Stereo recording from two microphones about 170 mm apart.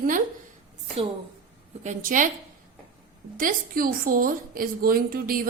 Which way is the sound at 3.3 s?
55° right (ahead or behind).